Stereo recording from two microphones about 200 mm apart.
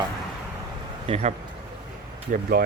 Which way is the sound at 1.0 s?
30° right (ahead or behind).